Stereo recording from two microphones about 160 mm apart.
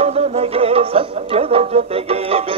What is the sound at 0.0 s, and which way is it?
Music, 40° right (ahead or behind).